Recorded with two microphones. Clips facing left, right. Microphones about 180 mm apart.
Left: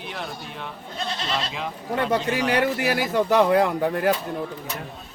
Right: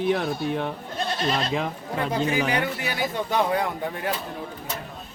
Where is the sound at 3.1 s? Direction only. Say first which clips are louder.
Left 7 dB; 85° left; by 4.0 s 70° left (ahead or behind).